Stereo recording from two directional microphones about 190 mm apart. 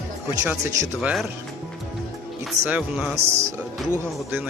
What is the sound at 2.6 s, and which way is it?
Speech, 10° right (ahead or behind).